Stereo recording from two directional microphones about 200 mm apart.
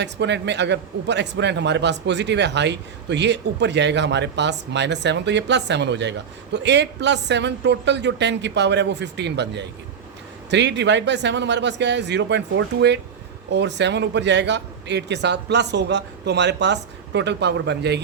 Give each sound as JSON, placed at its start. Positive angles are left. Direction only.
{"t": 0.0, "sound": "a man's voice", "side_deg": -60}